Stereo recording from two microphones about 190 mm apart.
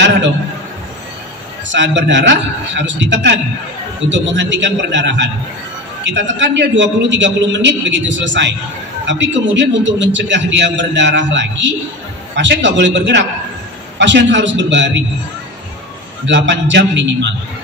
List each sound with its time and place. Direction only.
1.7 s a man's voice: 70° right (ahead or behind)
16.3 s a man's voice: 70° right (ahead or behind)